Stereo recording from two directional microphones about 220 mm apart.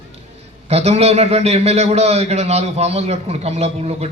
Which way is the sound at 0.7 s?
30° right (ahead or behind).